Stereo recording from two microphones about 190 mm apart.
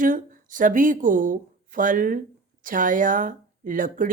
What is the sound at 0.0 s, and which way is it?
Speech, 45° right (ahead or behind).